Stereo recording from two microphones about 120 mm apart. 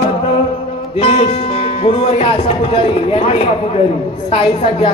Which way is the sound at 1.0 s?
55° left (ahead or behind).